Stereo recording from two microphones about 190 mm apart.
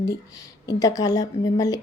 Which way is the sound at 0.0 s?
20° left (ahead or behind).